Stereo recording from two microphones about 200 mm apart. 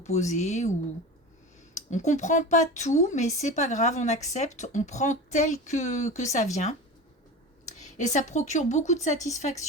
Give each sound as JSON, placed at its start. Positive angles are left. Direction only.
{"t": 0.0, "sound": "speech", "side_deg": 35}
{"t": 1.7, "sound": "speech", "side_deg": 35}